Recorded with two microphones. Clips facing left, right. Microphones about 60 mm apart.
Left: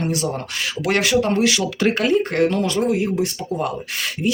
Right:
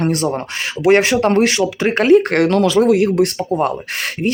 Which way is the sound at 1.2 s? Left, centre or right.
Right.